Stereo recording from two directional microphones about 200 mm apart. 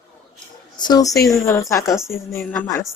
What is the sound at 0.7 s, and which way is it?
A woman's voice, 20° left (ahead or behind).